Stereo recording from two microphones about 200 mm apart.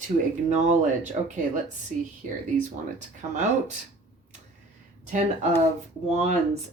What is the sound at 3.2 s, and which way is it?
Speech, 40° right (ahead or behind).